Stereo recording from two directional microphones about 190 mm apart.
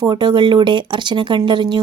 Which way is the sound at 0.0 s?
25° right (ahead or behind).